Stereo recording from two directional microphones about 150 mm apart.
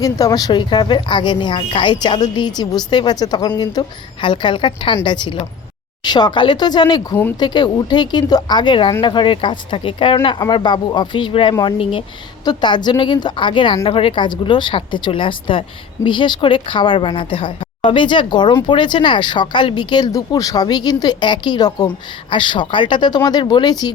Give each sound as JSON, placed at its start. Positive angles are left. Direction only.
{"t": 0.0, "sound": "speech", "side_deg": 25}